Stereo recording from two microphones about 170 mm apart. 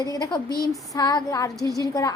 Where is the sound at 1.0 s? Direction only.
25° left (ahead or behind).